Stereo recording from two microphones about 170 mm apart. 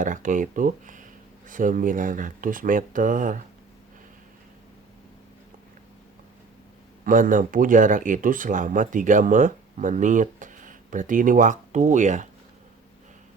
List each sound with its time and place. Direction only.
0.0 s speech: 50° right (ahead or behind)
7.0 s speech: 50° right (ahead or behind)